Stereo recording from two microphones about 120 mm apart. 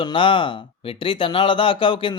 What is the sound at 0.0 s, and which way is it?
Speech, 45° left (ahead or behind).